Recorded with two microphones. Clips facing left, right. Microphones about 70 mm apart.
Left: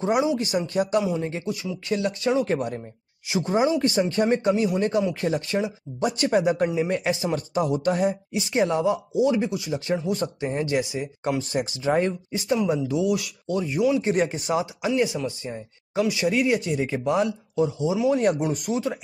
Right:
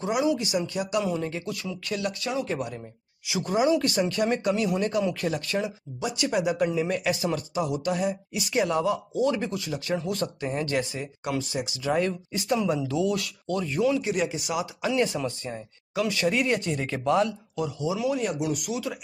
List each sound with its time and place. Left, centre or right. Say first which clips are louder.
0.4 s speech: left 4 dB; left
1.5 s speech: left 5 dB; centre
2.0 s speech: left 6 dB; left
3.3 s speech: left 1 dB; left
5.9 s speech: left 5 dB; left
7.3 s speech: left 4 dB; left
9.1 s speech: left 4 dB; centre
11.8 s speech: left 2 dB; left; by 14.0 s centre
14.0 s speech: left 4 dB; left
14.9 s speech: left 1 dB; centre; by 18.2 s left
18.2 s speech: left 5 dB; left